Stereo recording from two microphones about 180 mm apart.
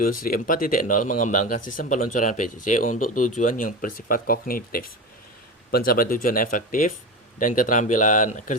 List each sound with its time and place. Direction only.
0.0 s speech: 50° left (ahead or behind)